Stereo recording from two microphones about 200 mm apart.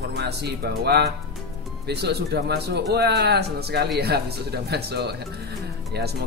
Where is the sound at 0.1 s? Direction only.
55° right (ahead or behind).